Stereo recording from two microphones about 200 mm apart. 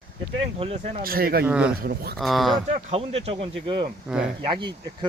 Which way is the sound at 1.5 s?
5° right (ahead or behind).